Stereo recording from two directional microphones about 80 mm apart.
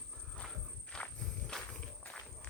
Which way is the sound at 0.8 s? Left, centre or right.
Centre.